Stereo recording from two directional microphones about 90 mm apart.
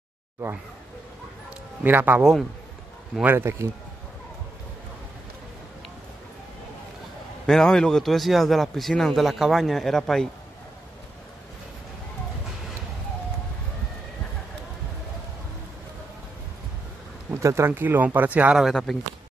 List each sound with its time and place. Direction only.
1.8 s speech: 20° right (ahead or behind)
7.4 s a man's voice: 5° left (ahead or behind)
17.3 s speech: 30° right (ahead or behind); by 18.6 s 15° right (ahead or behind)
18.6 s a man's voice: 5° left (ahead or behind)